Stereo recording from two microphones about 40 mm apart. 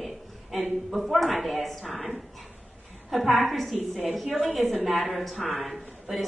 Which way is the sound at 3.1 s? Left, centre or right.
Centre.